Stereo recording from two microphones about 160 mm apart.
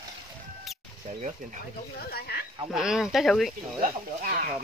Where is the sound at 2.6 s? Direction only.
5° right (ahead or behind).